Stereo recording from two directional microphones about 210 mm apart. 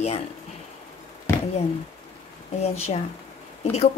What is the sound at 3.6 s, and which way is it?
Speech, 30° left (ahead or behind).